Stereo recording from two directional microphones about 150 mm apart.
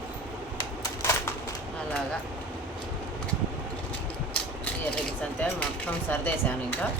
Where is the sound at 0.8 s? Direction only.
20° left (ahead or behind).